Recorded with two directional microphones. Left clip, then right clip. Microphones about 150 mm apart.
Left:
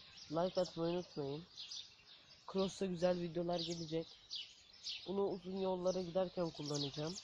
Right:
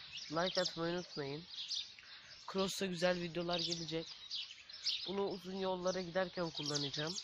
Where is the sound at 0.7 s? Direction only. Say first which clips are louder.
Even; 15° right (ahead or behind).